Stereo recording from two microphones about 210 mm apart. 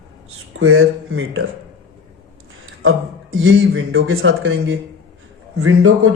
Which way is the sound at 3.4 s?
70° right (ahead or behind).